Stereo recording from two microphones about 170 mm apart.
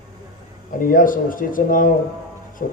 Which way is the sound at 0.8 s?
55° left (ahead or behind).